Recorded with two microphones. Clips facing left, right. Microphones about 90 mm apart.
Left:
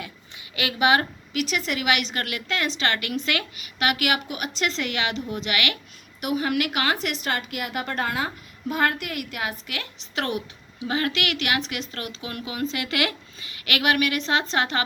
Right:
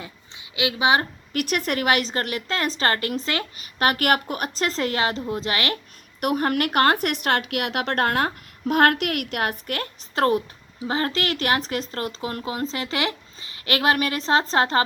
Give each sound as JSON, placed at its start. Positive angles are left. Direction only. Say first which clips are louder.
{"t": 0.5, "sound": "a woman's voice", "louder": "even", "side_deg": -20}
{"t": 1.3, "sound": "speech", "louder": "right 3 dB", "side_deg": -50}
{"t": 6.1, "sound": "speech", "louder": "right 2 dB", "side_deg": -50}